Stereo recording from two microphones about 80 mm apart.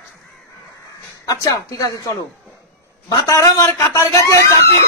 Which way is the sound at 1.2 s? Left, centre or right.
Left.